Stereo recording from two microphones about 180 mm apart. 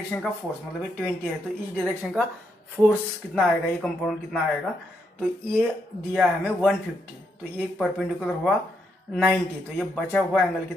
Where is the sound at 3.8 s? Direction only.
Centre (ahead or behind).